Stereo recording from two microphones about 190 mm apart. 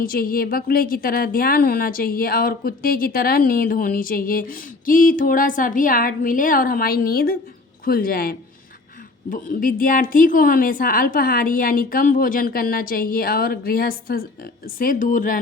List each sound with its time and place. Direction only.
0.0 s a woman's voice: 50° left (ahead or behind)